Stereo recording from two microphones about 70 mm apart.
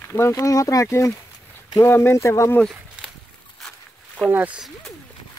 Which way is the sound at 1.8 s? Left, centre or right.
Left.